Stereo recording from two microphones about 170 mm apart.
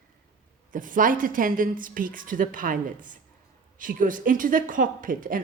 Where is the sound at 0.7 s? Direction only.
50° right (ahead or behind).